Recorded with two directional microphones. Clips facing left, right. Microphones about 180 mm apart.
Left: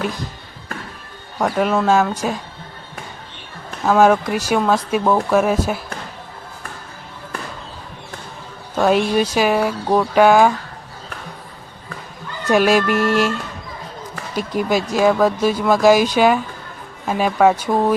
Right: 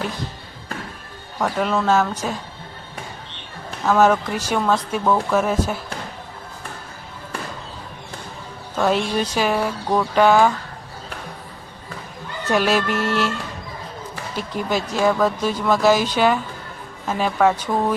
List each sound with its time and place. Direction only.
1.4 s speech: 15° left (ahead or behind)
3.8 s speech: 10° left (ahead or behind)
8.7 s speech: 10° left (ahead or behind)
12.5 s speech: 15° left (ahead or behind)
14.3 s speech: 15° left (ahead or behind)